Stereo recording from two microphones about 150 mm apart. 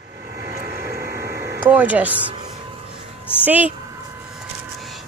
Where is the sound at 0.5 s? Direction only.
90° right.